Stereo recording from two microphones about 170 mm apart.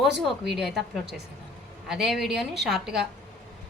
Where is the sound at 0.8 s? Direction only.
75° right (ahead or behind).